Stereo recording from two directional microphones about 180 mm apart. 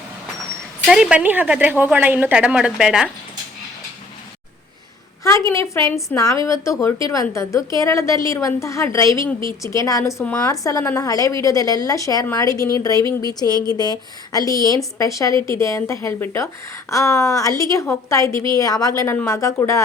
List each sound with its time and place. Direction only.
0.9 s a woman's voice: centre (ahead or behind)
5.2 s a woman's voice: 15° left (ahead or behind)